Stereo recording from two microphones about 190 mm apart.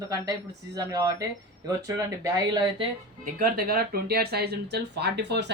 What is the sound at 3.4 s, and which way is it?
Speech, 50° right (ahead or behind).